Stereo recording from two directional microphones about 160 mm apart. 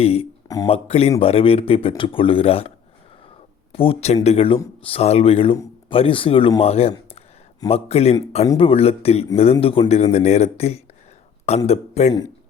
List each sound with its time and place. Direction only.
0.0 s speech: 40° left (ahead or behind)
0.4 s a sound: 20° left (ahead or behind)
0.7 s speech: 40° left (ahead or behind)